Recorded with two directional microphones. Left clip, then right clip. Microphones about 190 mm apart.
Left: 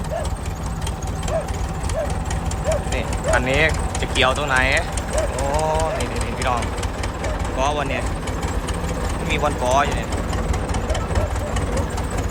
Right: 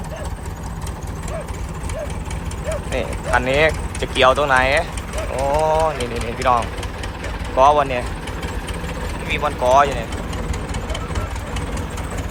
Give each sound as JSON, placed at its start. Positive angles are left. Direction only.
{"t": 2.9, "sound": "speech", "side_deg": 5}
{"t": 9.3, "sound": "speech", "side_deg": 15}